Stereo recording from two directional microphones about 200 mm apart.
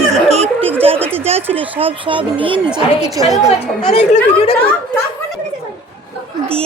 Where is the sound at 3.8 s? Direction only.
30° left (ahead or behind).